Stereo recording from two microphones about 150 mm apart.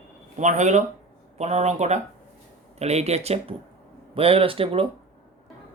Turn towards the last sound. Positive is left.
turn(degrees=-40)  # may be behind; listen again after turning